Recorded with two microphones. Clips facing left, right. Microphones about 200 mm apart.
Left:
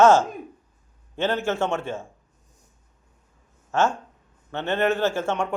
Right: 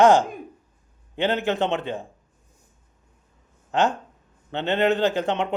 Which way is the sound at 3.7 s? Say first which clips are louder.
Right 1 dB; 15° right (ahead or behind).